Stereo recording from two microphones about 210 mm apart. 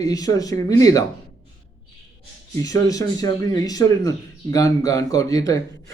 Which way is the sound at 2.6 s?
15° left (ahead or behind).